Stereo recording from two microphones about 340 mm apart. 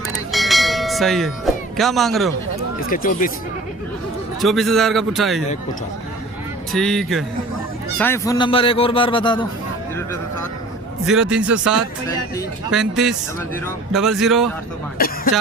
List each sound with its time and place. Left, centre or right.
0.3 s bell: centre
1.7 s a man's voice: centre
2.9 s speech: left
4.4 s a man's voice: centre
6.7 s a man's voice: centre
11.0 s a man's voice: centre
14.9 s speech: left